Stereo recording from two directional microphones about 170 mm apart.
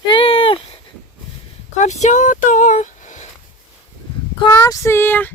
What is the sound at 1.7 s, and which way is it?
Speech, 45° left (ahead or behind).